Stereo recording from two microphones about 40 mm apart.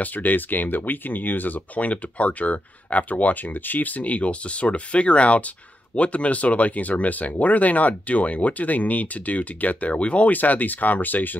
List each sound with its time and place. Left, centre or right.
0.0 s speech: left
10.3 s speech: left